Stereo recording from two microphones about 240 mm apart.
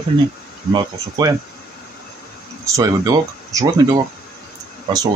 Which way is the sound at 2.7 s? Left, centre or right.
Centre.